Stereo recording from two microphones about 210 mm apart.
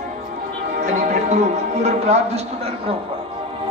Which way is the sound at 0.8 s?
35° right (ahead or behind).